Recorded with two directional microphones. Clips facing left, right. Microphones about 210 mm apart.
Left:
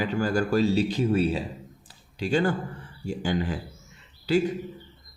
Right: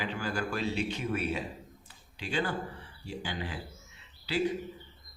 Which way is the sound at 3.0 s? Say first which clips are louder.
Left 10 dB; 45° left (ahead or behind).